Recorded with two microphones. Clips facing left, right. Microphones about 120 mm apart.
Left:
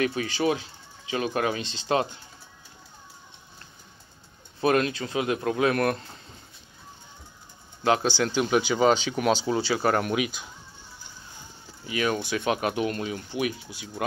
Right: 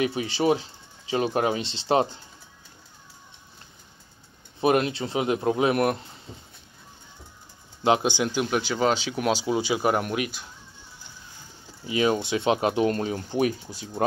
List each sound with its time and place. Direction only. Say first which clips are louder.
0.0 s speech: right 1 dB; 20° right (ahead or behind)
4.6 s speech: right 1 dB; 20° right (ahead or behind)
7.8 s speech: right 1 dB; 20° right (ahead or behind)
8.5 s speech: left 5 dB; centre (ahead or behind)
11.8 s speech: right 4 dB; 25° right (ahead or behind)